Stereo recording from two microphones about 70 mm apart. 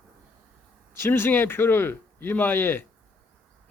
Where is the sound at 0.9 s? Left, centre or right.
Left.